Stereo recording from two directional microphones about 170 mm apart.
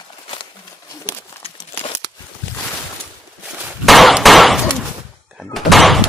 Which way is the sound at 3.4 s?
Centre (ahead or behind).